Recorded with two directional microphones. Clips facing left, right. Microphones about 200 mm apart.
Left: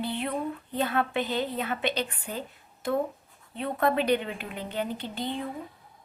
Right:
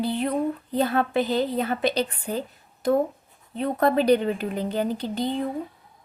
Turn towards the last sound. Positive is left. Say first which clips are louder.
# right 6 dB
turn(degrees=-40)  # may be behind; listen again after turning